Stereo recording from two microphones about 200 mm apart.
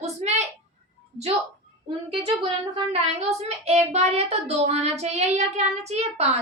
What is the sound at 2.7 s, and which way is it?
A woman's voice, 30° right (ahead or behind).